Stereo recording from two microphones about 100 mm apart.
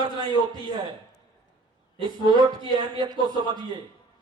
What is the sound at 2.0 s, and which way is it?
A man's voice, 50° right (ahead or behind).